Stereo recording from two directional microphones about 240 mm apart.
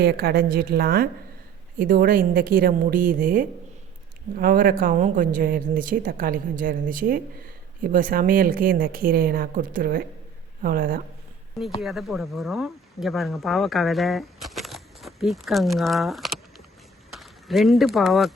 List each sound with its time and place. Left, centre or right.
0.0 s a woman's voice: right
11.8 s speech: centre